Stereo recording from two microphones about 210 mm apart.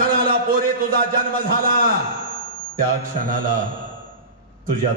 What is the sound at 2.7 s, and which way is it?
Mantra, 40° right (ahead or behind).